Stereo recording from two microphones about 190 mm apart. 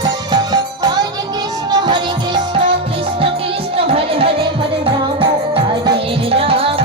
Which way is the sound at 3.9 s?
30° right (ahead or behind).